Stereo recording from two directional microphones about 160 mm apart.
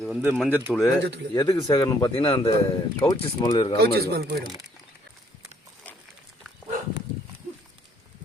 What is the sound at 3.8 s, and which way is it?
Speech, 80° right.